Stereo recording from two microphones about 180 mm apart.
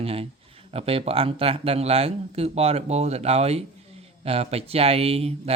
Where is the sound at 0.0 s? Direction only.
35° right (ahead or behind).